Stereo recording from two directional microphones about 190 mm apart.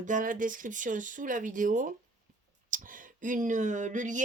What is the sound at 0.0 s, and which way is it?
Speech, 45° right (ahead or behind).